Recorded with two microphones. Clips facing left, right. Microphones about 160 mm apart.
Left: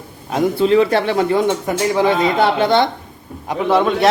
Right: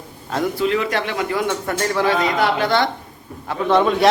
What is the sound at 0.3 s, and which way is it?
A man's voice, 20° left (ahead or behind).